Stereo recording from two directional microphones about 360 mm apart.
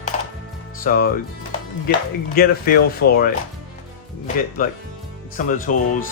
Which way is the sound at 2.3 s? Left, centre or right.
Left.